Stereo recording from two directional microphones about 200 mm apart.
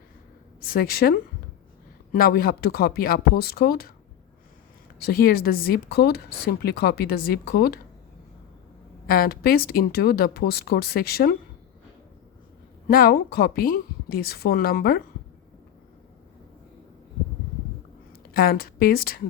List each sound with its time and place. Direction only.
0.6 s speech: 50° left (ahead or behind)
4.9 s speech: 50° left (ahead or behind)
9.0 s speech: 45° left (ahead or behind)
12.9 s speech: 45° left (ahead or behind)
18.3 s speech: 50° left (ahead or behind)